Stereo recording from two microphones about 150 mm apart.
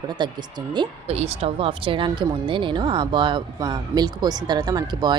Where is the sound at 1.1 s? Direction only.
40° right (ahead or behind).